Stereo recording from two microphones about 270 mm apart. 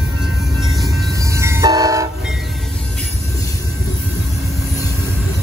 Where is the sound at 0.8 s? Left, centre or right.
Centre.